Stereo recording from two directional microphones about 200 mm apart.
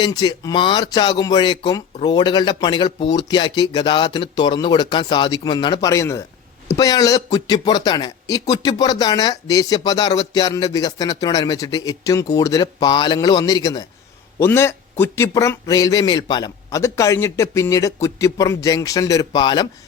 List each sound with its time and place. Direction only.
0.0 s a man's voice: 20° left (ahead or behind)